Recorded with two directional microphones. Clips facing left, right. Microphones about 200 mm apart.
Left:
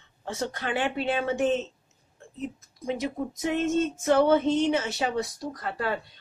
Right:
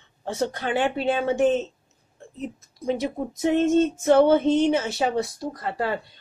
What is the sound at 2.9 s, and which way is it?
A woman's voice, 30° right (ahead or behind).